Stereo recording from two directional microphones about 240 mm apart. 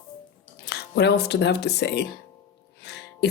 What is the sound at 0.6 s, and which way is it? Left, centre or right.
Speech, left.